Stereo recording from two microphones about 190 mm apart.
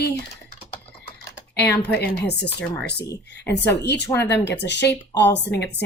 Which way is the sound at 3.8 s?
65° left (ahead or behind).